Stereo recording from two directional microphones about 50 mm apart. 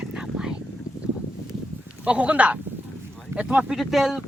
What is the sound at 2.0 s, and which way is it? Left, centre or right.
Speech, right.